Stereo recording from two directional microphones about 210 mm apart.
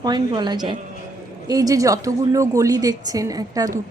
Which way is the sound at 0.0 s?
20° right (ahead or behind).